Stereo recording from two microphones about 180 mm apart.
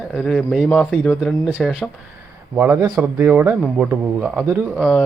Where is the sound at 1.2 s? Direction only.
5° right (ahead or behind).